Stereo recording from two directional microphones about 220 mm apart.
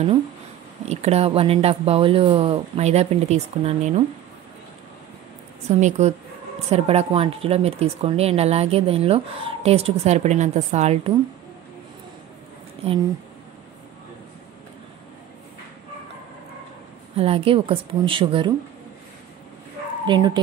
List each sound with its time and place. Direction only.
0.8 s speech: 30° right (ahead or behind)
5.7 s a woman's voice: 30° right (ahead or behind)
17.2 s speech: 25° right (ahead or behind)
20.1 s speech: 20° right (ahead or behind)